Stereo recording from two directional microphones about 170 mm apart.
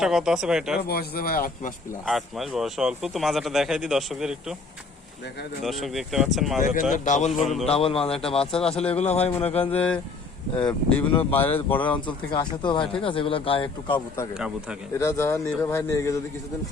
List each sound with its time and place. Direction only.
0.0 s speech: 5° right (ahead or behind)
0.8 s speech: 65° left (ahead or behind)
2.0 s speech: centre (ahead or behind)
5.6 s speech: centre (ahead or behind)
6.6 s a man's voice: 50° left (ahead or behind)
7.7 s speech: 35° left (ahead or behind)
9.7 s a man's voice: 10° left (ahead or behind)
12.0 s speech: 25° left (ahead or behind)
14.3 s speech: 5° right (ahead or behind)
14.9 s a man's voice: 15° left (ahead or behind)